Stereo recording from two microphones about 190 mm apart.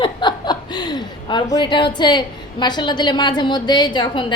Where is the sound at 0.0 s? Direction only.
25° left (ahead or behind).